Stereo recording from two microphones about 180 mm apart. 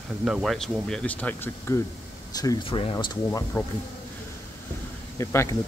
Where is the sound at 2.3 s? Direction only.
25° left (ahead or behind).